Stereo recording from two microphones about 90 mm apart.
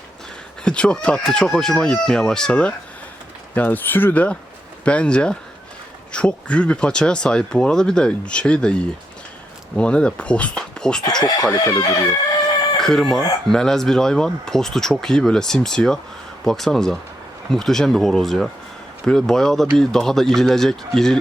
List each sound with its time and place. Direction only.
0.6 s speech: 10° left (ahead or behind)
11.2 s speech: 50° left (ahead or behind)
12.7 s speech: 5° left (ahead or behind)